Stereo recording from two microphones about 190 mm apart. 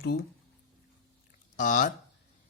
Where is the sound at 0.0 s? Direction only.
55° left (ahead or behind).